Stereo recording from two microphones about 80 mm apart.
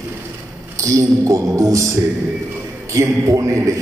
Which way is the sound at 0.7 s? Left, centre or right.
Right.